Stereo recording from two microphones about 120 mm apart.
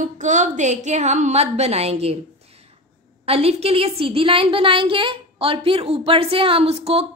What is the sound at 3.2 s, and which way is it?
A woman's voice, 55° right (ahead or behind).